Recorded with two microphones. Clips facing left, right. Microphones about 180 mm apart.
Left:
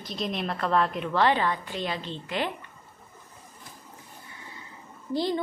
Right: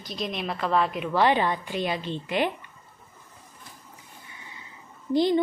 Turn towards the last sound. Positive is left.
turn(degrees=-20)  # may be behind; listen again after turning